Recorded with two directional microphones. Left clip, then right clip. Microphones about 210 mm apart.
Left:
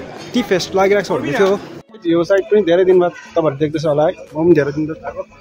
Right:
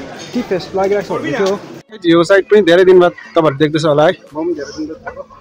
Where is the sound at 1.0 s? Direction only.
40° left (ahead or behind).